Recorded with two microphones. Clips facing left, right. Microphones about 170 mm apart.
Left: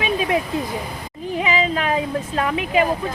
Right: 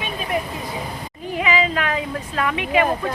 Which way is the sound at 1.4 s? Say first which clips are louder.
Even; 35° left (ahead or behind).